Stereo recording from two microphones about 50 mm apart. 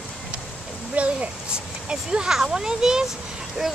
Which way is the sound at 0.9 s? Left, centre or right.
Right.